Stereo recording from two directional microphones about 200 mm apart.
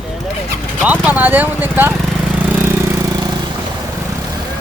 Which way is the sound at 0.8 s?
10° right (ahead or behind).